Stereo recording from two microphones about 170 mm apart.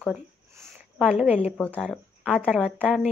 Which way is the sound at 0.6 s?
5° right (ahead or behind).